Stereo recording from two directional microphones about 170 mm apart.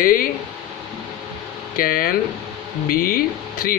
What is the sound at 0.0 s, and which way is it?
Speech, 55° left (ahead or behind).